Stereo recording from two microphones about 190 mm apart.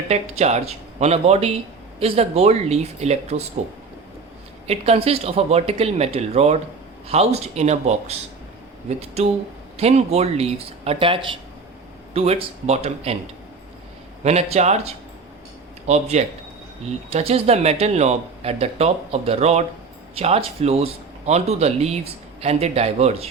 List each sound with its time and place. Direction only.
0.1 s speech: 35° right (ahead or behind)
4.6 s speech: 30° right (ahead or behind)
14.3 s speech: 35° right (ahead or behind)